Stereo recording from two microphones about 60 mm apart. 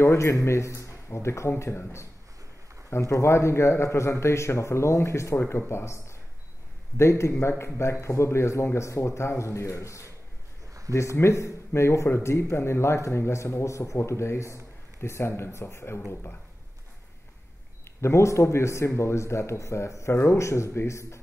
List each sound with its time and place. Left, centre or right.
0.0 s a man's voice: left
11.1 s speech: left
18.0 s speech: left